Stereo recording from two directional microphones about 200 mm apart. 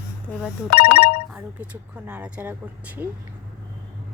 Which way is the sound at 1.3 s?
10° right (ahead or behind).